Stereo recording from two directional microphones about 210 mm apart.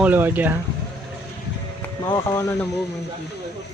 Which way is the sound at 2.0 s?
15° left (ahead or behind).